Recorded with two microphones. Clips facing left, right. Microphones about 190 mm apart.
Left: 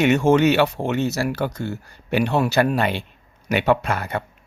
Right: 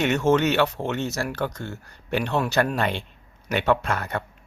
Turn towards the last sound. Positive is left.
turn(degrees=5)  # may be behind; listen again after turning